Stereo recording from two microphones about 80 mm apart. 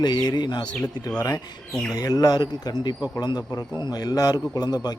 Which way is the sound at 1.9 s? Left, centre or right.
Left.